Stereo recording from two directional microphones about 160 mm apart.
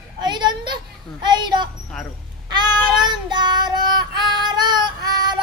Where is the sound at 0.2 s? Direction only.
30° right (ahead or behind).